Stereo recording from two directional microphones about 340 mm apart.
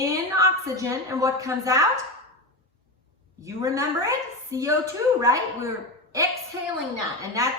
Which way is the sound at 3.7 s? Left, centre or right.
Centre.